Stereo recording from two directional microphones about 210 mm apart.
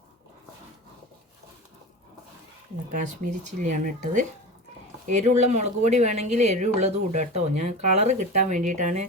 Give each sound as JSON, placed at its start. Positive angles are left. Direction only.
{"t": 3.2, "sound": "speech", "side_deg": -35}